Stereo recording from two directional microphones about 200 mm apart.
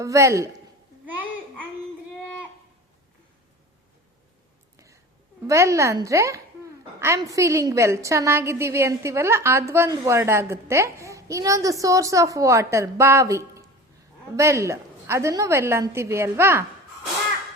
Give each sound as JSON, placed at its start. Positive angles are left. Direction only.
{"t": 0.0, "sound": "a woman's voice", "side_deg": -15}
{"t": 5.5, "sound": "a woman's voice", "side_deg": -15}